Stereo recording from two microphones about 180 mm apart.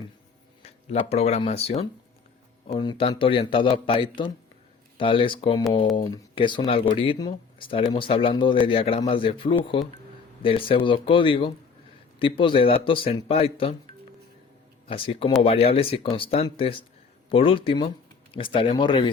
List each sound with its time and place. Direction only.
0.6 s a man's voice: 35° left (ahead or behind)
14.8 s a man's voice: 30° left (ahead or behind)